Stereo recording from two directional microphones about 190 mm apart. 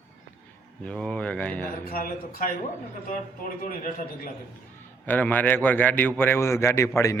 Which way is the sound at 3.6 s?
45° left (ahead or behind).